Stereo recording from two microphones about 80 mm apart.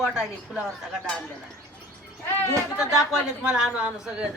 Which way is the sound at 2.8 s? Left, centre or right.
Centre.